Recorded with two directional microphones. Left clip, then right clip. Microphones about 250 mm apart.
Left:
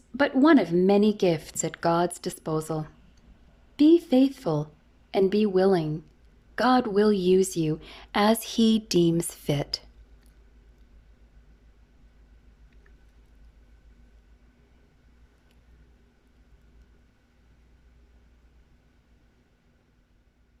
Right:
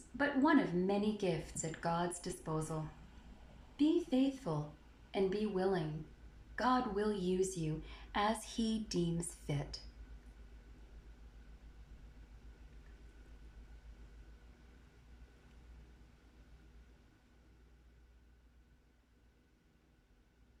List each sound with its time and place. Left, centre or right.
0.2 s a woman's voice: left
3.8 s a woman's voice: left